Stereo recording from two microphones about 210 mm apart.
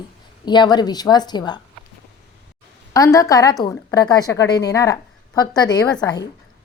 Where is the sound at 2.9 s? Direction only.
15° left (ahead or behind).